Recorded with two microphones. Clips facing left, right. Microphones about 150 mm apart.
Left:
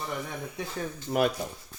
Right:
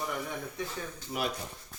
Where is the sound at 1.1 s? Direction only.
60° left (ahead or behind).